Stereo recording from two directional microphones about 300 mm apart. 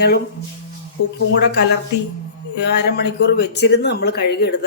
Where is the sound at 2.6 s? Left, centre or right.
Left.